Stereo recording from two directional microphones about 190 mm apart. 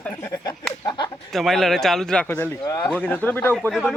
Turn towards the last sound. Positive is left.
turn(degrees=5)  # may be behind; listen again after turning